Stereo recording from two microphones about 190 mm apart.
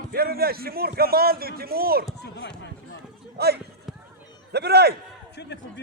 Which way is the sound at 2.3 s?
65° left (ahead or behind).